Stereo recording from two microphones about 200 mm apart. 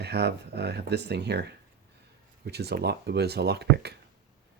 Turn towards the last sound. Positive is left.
turn(degrees=-55)  # may be behind; listen again after turning